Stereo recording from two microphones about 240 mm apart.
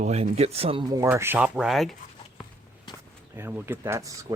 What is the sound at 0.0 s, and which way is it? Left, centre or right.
Speech, right.